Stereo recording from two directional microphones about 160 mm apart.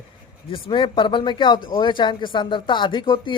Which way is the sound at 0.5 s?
30° left (ahead or behind).